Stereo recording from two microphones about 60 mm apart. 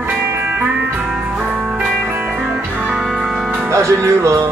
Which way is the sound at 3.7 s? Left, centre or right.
Right.